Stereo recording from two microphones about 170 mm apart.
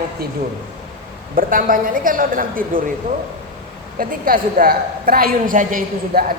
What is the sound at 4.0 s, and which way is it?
A woman's voice, 55° right (ahead or behind).